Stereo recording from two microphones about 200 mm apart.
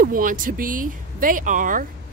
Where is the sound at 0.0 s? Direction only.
45° right (ahead or behind).